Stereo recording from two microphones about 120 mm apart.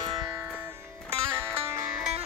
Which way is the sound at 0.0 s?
35° right (ahead or behind).